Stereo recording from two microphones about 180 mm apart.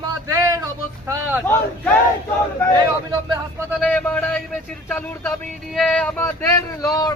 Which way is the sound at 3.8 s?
10° left (ahead or behind).